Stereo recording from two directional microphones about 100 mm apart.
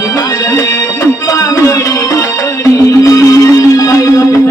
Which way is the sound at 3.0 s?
30° left (ahead or behind).